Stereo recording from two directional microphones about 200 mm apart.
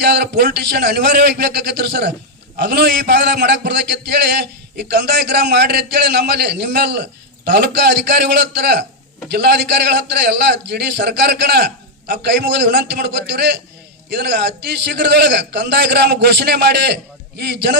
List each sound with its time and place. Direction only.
0.0 s a man's voice: 55° right (ahead or behind)